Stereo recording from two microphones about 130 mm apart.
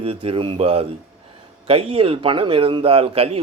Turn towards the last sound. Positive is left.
turn(degrees=-50)  # may be behind; listen again after turning